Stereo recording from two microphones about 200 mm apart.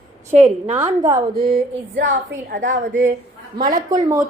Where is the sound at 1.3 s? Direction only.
50° right (ahead or behind).